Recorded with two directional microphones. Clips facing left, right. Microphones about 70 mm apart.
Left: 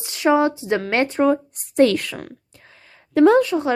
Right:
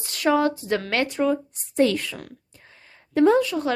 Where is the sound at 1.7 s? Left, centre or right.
Left.